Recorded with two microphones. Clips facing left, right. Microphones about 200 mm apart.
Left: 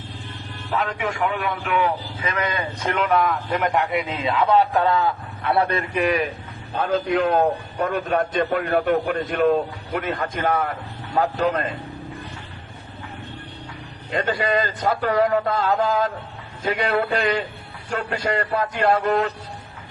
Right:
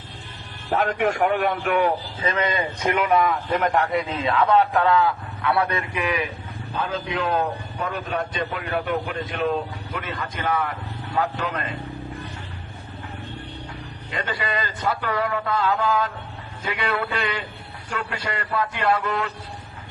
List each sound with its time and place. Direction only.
0.7 s a man's voice: 55° right (ahead or behind)
2.3 s speech: 25° right (ahead or behind)
3.1 s a man's voice: 5° right (ahead or behind)
4.1 s a man's voice: 25° left (ahead or behind)
5.5 s a man's voice: 30° left (ahead or behind)
14.1 s a man's voice: 45° left (ahead or behind)